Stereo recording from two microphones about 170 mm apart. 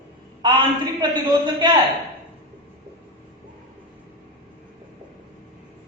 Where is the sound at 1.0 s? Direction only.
25° right (ahead or behind).